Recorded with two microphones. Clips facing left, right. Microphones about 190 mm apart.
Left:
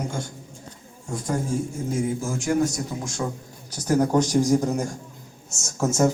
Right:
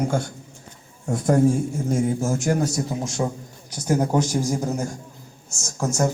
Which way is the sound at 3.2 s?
25° right (ahead or behind).